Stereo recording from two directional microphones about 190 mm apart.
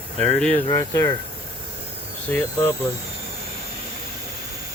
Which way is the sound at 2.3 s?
10° left (ahead or behind).